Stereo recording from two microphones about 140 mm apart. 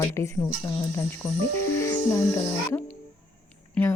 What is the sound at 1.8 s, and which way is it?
Music, 15° left (ahead or behind).